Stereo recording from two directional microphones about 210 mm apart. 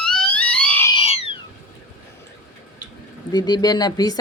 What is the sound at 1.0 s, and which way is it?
Owl, 25° left (ahead or behind).